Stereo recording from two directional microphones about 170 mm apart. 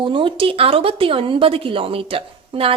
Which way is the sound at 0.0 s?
30° right (ahead or behind).